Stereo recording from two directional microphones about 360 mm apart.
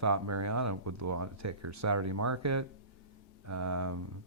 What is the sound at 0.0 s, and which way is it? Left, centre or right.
Speech, right.